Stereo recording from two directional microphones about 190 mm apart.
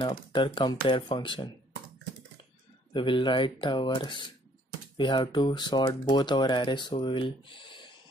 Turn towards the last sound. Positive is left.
turn(degrees=25)  # may be behind; listen again after turning